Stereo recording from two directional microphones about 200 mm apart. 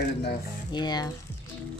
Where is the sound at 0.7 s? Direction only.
20° left (ahead or behind).